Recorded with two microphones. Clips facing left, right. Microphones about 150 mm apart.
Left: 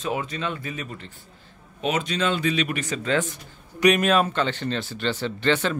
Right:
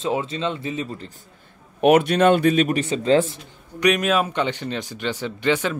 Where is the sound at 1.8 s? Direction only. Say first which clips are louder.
Right 10 dB; 60° right (ahead or behind); by 3.3 s 30° right (ahead or behind).